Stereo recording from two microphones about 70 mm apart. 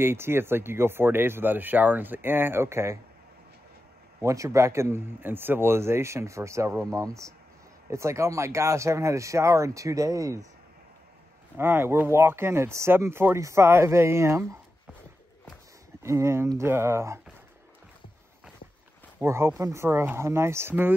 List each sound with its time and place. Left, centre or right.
0.0 s speech: right
4.2 s speech: right
11.5 s speech: right
16.0 s speech: right
19.2 s speech: right